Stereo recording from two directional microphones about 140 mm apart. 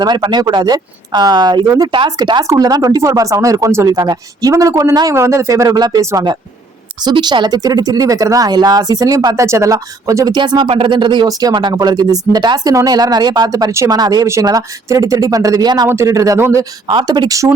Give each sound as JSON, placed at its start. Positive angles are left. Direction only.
{"t": 0.0, "sound": "speech", "side_deg": -30}